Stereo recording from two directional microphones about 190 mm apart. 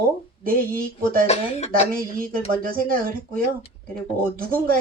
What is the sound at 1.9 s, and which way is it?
A woman's voice, 50° right (ahead or behind).